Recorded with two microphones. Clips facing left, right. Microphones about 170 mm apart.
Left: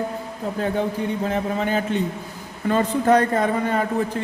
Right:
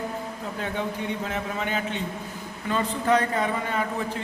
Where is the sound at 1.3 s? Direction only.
35° left (ahead or behind).